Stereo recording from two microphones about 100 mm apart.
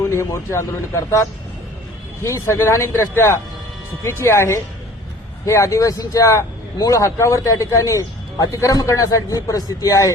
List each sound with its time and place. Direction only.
0.0 s speech: 30° left (ahead or behind)